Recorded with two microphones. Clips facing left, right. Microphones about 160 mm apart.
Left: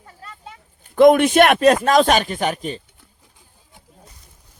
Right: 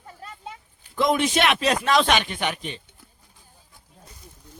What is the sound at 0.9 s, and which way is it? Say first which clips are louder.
Speech: left 10 dB; 55° left (ahead or behind).